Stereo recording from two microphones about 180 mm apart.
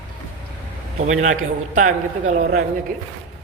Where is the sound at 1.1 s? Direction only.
45° right (ahead or behind).